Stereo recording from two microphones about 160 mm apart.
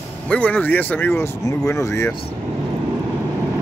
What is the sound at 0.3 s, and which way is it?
Speech, 10° left (ahead or behind).